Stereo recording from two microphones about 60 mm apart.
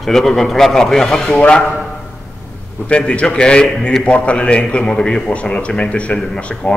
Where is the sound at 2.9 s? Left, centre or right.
Centre.